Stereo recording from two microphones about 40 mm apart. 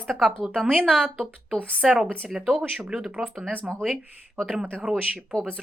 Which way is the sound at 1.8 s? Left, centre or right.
Centre.